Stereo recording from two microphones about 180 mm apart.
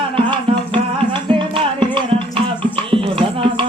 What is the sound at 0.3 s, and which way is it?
Music, 30° right (ahead or behind).